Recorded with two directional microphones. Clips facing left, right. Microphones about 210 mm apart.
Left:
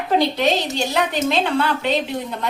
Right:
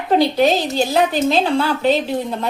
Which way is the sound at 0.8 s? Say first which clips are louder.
Right 4 dB; 35° right (ahead or behind).